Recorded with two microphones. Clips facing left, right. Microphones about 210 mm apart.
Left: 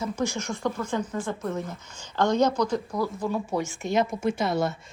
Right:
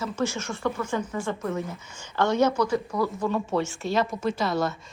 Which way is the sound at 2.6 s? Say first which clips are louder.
Right 1 dB; 15° left (ahead or behind).